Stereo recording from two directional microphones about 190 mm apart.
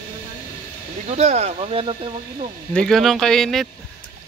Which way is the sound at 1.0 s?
35° right (ahead or behind).